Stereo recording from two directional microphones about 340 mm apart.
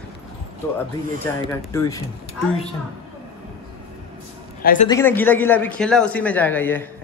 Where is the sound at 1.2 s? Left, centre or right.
Centre.